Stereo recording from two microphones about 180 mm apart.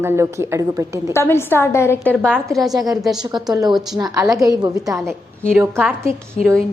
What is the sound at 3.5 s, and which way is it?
A woman's voice, 20° right (ahead or behind).